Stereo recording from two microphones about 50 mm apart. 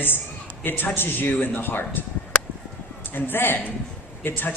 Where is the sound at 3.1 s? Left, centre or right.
Left.